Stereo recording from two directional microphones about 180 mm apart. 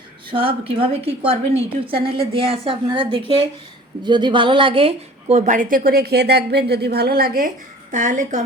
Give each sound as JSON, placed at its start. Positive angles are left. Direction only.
{"t": 0.3, "sound": "a woman's voice", "side_deg": -30}